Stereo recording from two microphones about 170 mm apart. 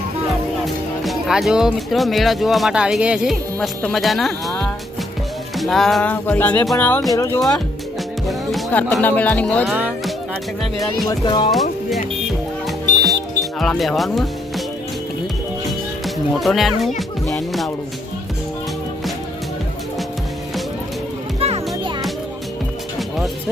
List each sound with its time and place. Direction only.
0.6 s speech: centre (ahead or behind); by 7.5 s 20° left (ahead or behind)
8.3 s speech: centre (ahead or behind)
11.1 s speech: 25° left (ahead or behind)
12.6 s music: centre (ahead or behind)
16.0 s speech: centre (ahead or behind)
21.4 s music: 35° right (ahead or behind)
23.0 s music: centre (ahead or behind)